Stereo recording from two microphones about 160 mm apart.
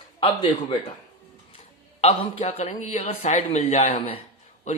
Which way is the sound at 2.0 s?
40° left (ahead or behind).